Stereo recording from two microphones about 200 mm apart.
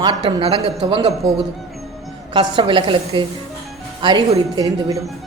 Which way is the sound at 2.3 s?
25° right (ahead or behind).